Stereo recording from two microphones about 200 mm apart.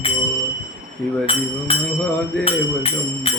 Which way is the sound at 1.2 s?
30° left (ahead or behind).